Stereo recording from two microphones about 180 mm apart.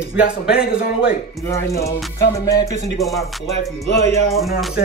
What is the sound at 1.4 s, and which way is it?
Speech, 15° left (ahead or behind).